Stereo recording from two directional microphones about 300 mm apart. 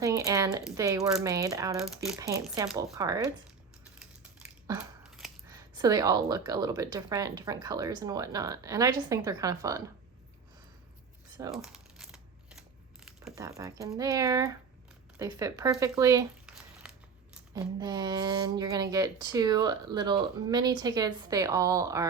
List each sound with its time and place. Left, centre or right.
0.0 s speech: centre
4.0 s a sound: centre
5.5 s speech: centre
11.5 s crumpling: centre
13.1 s speech: centre